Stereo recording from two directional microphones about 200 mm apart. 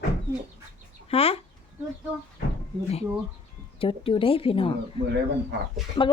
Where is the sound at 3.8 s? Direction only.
25° left (ahead or behind).